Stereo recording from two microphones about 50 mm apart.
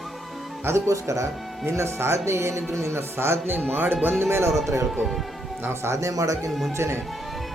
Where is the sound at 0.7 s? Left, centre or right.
Right.